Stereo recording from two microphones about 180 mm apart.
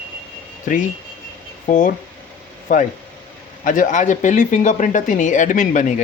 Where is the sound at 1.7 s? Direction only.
50° left (ahead or behind).